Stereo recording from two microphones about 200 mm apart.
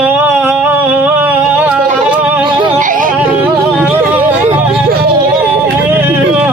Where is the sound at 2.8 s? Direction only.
40° right (ahead or behind).